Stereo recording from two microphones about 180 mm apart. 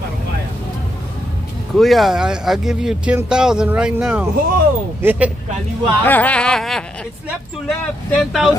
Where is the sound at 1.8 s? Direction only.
Centre (ahead or behind).